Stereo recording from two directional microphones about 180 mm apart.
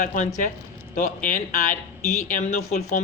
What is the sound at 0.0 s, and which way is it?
A man's voice, 45° left (ahead or behind).